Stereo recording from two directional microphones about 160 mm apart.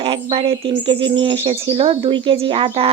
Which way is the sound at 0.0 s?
35° right (ahead or behind).